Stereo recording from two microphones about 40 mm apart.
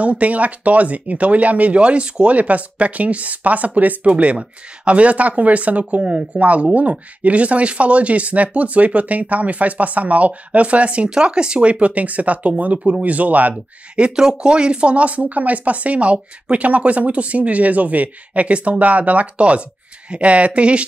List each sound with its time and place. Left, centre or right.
0.0 s speech: right
1.8 s speech: right
11.1 s speech: right
13.9 s speech: right